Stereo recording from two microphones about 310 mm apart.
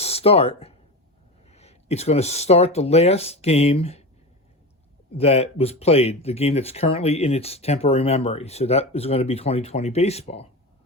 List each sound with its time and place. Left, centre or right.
0.0 s speech: centre
5.1 s speech: centre